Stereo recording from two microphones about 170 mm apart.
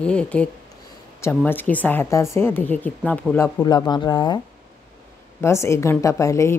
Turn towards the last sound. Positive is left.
turn(degrees=15)  # may be behind; listen again after turning